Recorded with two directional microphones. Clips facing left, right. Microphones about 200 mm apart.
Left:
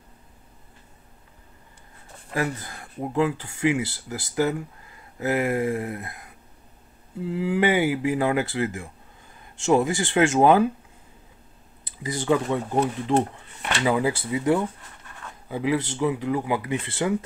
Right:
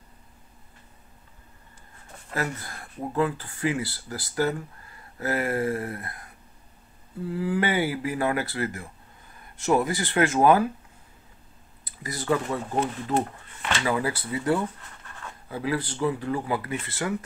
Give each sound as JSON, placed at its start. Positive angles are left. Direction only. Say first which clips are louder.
{"t": 2.3, "sound": "speech", "louder": "left 3 dB", "side_deg": 15}
{"t": 11.8, "sound": "speech", "louder": "left 5 dB", "side_deg": 25}